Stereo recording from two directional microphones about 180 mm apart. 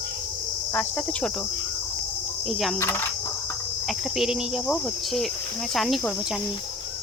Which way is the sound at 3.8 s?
Centre (ahead or behind).